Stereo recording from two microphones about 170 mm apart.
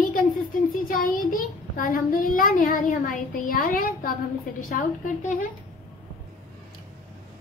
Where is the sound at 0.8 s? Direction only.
55° left (ahead or behind).